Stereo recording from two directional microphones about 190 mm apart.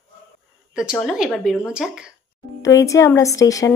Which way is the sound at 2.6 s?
15° left (ahead or behind).